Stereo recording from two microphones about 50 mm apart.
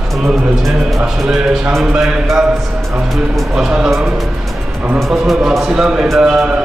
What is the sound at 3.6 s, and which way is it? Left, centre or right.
Speech, centre.